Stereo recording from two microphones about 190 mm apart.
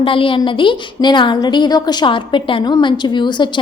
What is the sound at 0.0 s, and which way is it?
A woman's voice, 25° left (ahead or behind).